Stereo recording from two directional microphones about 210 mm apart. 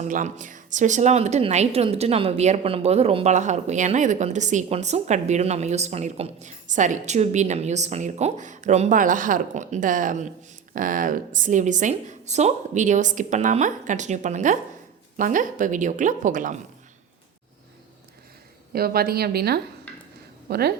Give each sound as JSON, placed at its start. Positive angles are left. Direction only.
{"t": 0.0, "sound": "a woman's voice", "side_deg": -35}
{"t": 18.7, "sound": "a woman's voice", "side_deg": -45}